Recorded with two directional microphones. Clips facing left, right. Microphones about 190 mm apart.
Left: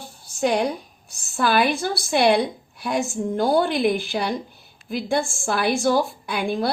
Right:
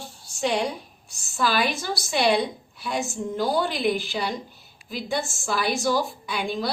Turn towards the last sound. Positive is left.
turn(degrees=55)  # may be behind; listen again after turning